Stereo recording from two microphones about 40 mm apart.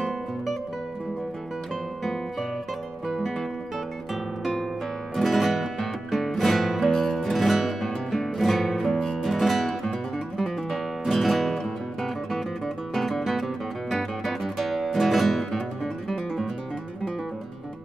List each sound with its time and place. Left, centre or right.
4.1 s guitar: centre
5.1 s music: centre
6.9 s music: centre
7.2 s music: centre
9.8 s guitar: centre